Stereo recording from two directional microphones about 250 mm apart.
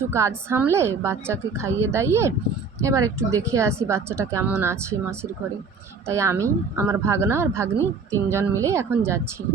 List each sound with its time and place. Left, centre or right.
0.0 s speech: centre